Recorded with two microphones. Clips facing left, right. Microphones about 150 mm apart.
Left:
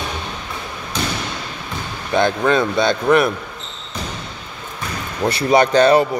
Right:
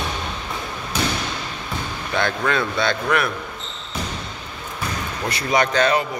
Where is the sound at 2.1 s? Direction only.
20° left (ahead or behind).